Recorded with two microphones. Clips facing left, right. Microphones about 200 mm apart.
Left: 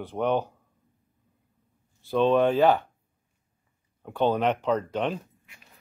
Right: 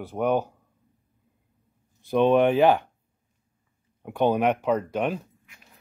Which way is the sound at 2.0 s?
15° right (ahead or behind).